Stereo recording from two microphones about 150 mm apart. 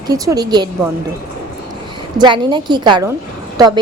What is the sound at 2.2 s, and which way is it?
A woman's voice, 30° right (ahead or behind).